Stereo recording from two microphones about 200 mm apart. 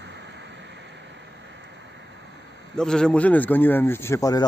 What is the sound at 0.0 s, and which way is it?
Vehicle, 60° right (ahead or behind).